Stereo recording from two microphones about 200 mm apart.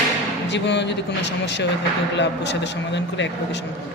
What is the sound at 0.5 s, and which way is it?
Speech, 60° left (ahead or behind).